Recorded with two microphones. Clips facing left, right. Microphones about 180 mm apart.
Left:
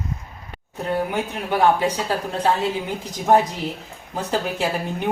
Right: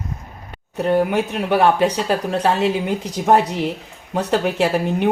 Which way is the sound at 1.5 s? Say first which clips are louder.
Right 2 dB; 75° right (ahead or behind).